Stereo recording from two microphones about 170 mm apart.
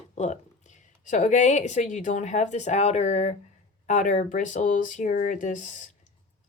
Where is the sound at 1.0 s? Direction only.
45° left (ahead or behind).